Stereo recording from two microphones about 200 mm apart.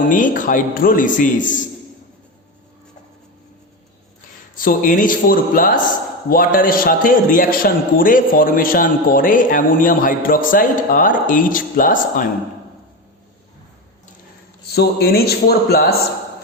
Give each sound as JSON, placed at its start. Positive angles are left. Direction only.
{"t": 0.0, "sound": "a man's voice", "side_deg": 40}
{"t": 4.5, "sound": "a man's voice", "side_deg": 45}
{"t": 14.7, "sound": "a man's voice", "side_deg": 50}